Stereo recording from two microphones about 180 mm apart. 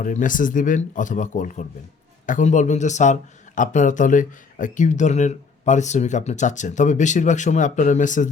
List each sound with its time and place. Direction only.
0.0 s a man's voice: 45° left (ahead or behind)